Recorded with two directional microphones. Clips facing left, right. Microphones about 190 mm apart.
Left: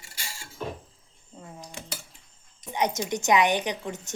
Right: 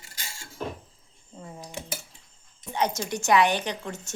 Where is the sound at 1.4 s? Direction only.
5° right (ahead or behind).